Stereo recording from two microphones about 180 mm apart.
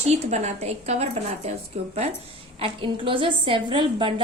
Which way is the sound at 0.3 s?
40° right (ahead or behind).